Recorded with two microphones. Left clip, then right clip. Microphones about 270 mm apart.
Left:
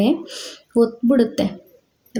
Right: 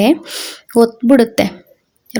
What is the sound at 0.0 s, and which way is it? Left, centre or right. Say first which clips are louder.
A woman's voice: right 7 dB; right.